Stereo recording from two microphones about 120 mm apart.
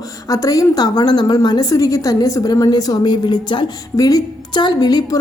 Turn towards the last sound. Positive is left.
turn(degrees=30)  # may be behind; listen again after turning